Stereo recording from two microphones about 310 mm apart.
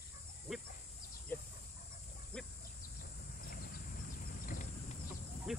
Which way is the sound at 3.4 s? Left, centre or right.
Left.